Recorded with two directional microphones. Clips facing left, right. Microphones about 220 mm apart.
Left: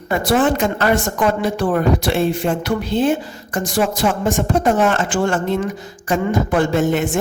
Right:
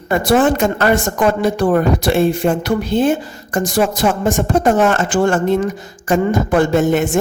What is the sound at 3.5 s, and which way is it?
Speech, 45° right (ahead or behind).